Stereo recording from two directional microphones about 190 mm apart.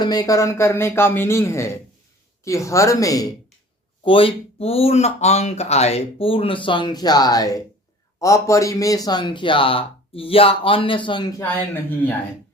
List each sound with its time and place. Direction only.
0.0 s speech: 20° left (ahead or behind)
11.4 s speech: 10° left (ahead or behind)